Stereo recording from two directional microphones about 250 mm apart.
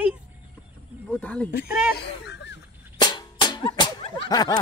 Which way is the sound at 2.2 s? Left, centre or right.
Left.